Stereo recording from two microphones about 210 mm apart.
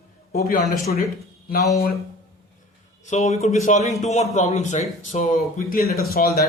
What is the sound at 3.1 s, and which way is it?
Speech, 30° left (ahead or behind).